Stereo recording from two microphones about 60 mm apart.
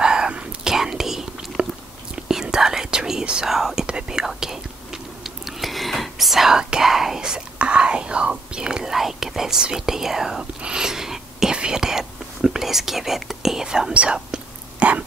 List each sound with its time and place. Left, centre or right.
0.0 s whispering: centre
0.7 s whispering: centre
1.6 s biting: right
2.1 s whispering: centre